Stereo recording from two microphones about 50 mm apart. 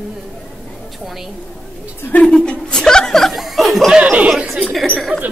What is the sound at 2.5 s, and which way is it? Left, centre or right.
Chuckle, centre.